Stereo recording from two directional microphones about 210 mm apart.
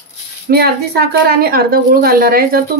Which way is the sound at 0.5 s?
50° right (ahead or behind).